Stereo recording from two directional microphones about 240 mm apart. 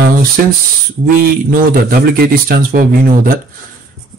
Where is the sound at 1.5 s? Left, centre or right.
Right.